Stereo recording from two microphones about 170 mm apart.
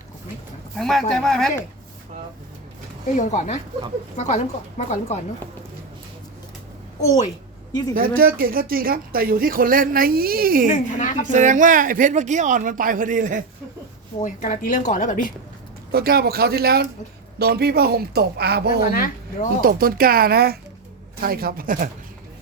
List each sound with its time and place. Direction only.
0.8 s speech: centre (ahead or behind)
3.2 s a woman's voice: 45° left (ahead or behind)
7.9 s speech: 60° right (ahead or behind)
10.7 s a woman's voice: 45° left (ahead or behind)
11.3 s speech: 45° right (ahead or behind)
14.2 s a woman's voice: 45° left (ahead or behind)
15.9 s a man's voice: 65° right (ahead or behind)
18.9 s speech: 55° left (ahead or behind)
19.6 s speech: 60° right (ahead or behind)